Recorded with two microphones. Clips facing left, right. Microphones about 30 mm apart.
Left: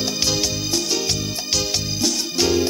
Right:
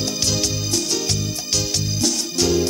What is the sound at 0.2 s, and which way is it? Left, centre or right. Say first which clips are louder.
Music: left 1 dB; centre.